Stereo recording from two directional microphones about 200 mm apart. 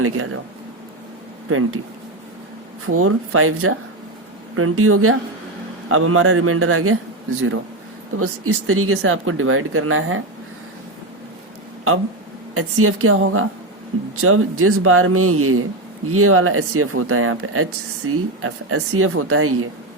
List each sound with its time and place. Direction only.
1.5 s speech: 90° right
2.8 s speech: 90° right
8.1 s speech: 90° right
12.5 s speech: 90° right